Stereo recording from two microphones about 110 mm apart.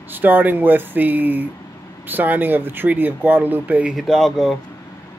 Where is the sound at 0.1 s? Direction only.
15° right (ahead or behind).